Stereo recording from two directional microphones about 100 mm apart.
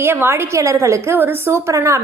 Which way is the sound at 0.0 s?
25° right (ahead or behind).